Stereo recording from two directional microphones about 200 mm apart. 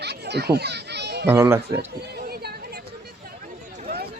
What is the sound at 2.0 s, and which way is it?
Chatter, 55° right (ahead or behind).